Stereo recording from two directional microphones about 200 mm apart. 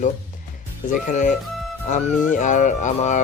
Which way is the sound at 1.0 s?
40° left (ahead or behind).